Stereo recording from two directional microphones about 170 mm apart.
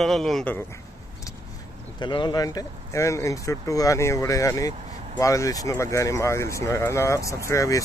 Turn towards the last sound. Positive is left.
turn(degrees=20)  # may be behind; listen again after turning